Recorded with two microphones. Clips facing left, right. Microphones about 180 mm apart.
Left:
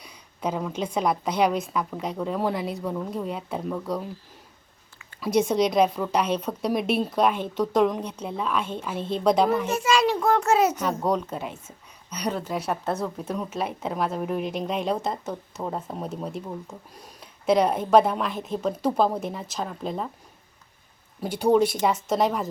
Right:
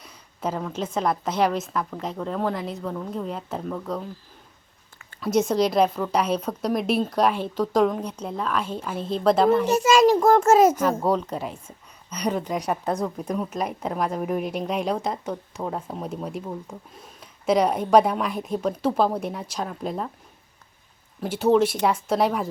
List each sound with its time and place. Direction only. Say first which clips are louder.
0.5 s speech: left 1 dB; 5° right (ahead or behind)
0.8 s a woman's voice: even; 10° left (ahead or behind)
5.2 s speech: right 1 dB; 10° left (ahead or behind)
6.1 s speech: right 1 dB; 5° right (ahead or behind)
6.6 s speech: right 1 dB; 5° left (ahead or behind)
9.6 s a child's voice: right 5 dB; 40° right (ahead or behind)
10.8 s speech: right 3 dB; 5° right (ahead or behind)
12.2 s speech: right 2 dB; 10° right (ahead or behind)
13.6 s speech: right 1 dB; 5° left (ahead or behind)
16.0 s speech: right 1 dB; 10° right (ahead or behind)
21.2 s speech: right 1 dB; 5° right (ahead or behind)